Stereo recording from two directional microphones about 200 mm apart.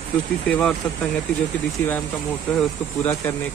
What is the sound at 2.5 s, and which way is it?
Speech, 5° left (ahead or behind).